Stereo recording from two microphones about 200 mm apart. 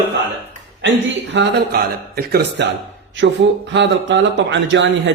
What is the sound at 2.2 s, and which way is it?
Speech, 50° right (ahead or behind).